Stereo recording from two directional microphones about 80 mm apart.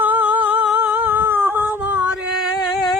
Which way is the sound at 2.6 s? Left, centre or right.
Centre.